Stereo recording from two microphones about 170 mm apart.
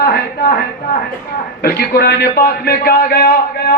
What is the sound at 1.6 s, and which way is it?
A man's voice, 65° left (ahead or behind).